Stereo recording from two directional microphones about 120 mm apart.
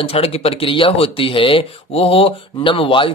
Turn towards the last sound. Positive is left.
turn(degrees=45)  # may be behind; listen again after turning